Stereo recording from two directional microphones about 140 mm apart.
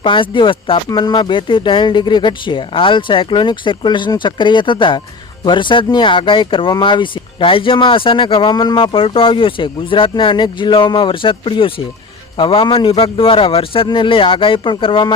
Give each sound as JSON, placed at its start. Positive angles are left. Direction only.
{"t": 0.0, "sound": "speech", "side_deg": 35}